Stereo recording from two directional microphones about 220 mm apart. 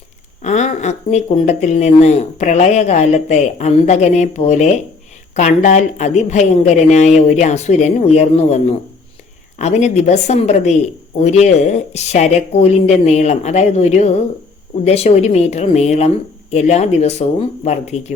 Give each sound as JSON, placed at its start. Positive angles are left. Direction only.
{"t": 0.4, "sound": "speech", "side_deg": 30}